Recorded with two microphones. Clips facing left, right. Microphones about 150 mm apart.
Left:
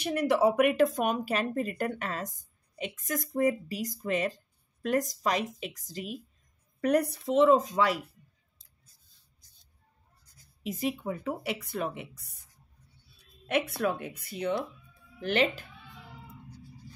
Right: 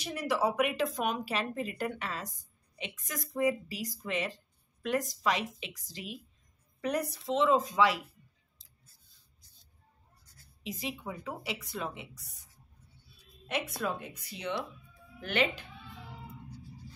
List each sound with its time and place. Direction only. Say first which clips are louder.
0.0 s speech: left 6 dB; 55° left (ahead or behind)
10.2 s bleat: even; 15° left (ahead or behind)
10.6 s speech: left 7 dB; 50° left (ahead or behind)
13.5 s speech: left 6 dB; 60° left (ahead or behind)
15.1 s speech: left 4 dB; 35° left (ahead or behind)